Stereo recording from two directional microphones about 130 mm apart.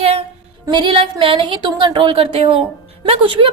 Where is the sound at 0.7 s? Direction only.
40° right (ahead or behind).